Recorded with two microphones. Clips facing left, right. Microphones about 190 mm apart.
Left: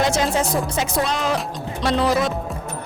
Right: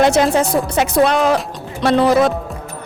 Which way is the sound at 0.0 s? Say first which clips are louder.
Right 7 dB; 65° right (ahead or behind).